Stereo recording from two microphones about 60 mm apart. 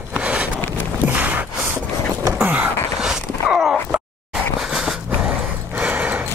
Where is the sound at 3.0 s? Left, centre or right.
Centre.